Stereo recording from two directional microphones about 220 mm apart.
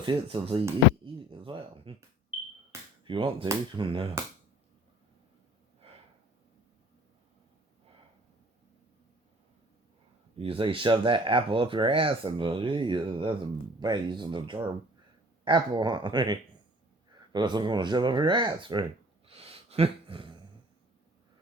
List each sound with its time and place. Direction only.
0.0 s speech: 20° right (ahead or behind)
1.0 s a sound: 25° right (ahead or behind)
3.0 s speech: 25° right (ahead or behind)
5.8 s gasp: 25° right (ahead or behind)
10.3 s speech: 25° right (ahead or behind)